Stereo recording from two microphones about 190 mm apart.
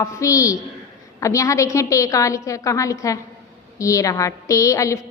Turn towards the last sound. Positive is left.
turn(degrees=15)  # may be behind; listen again after turning